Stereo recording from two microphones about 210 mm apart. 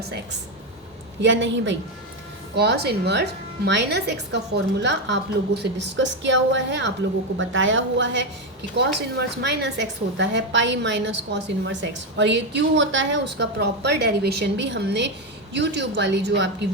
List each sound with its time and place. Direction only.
0.0 s a woman's voice: 50° right (ahead or behind)